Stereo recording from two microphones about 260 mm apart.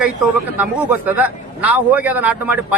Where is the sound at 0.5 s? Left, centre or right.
Centre.